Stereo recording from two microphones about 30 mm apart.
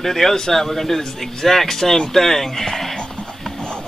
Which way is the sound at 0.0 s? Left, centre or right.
Centre.